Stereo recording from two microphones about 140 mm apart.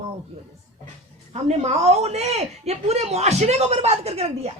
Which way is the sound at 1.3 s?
50° right (ahead or behind).